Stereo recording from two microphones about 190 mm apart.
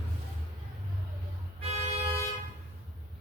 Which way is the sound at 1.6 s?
30° right (ahead or behind).